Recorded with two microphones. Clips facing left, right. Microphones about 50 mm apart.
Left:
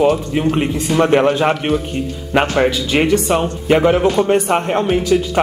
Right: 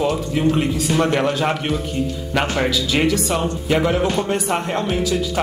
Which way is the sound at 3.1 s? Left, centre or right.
Left.